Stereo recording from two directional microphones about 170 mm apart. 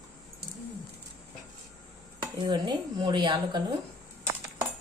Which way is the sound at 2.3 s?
25° right (ahead or behind).